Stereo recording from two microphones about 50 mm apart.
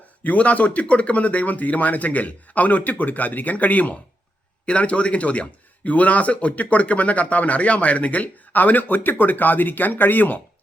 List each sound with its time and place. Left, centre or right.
0.2 s a man's voice: left